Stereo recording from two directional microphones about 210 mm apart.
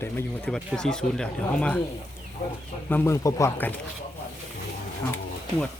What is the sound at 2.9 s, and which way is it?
Speech, 10° left (ahead or behind).